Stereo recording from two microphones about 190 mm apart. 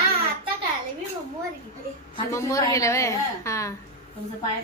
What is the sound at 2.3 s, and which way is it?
A woman's voice, 15° left (ahead or behind).